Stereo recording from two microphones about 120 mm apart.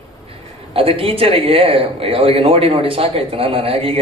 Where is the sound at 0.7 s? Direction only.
50° right (ahead or behind).